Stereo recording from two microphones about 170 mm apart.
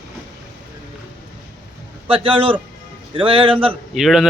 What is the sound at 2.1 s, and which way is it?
A man's voice, 30° right (ahead or behind).